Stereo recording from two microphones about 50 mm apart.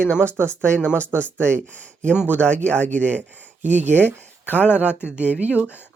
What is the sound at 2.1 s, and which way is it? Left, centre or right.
Speech, left.